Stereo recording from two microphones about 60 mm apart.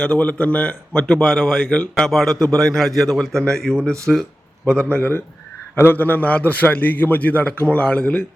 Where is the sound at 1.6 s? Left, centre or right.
Left.